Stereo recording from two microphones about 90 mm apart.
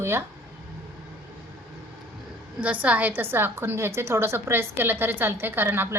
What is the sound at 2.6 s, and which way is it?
A woman's voice, 15° right (ahead or behind).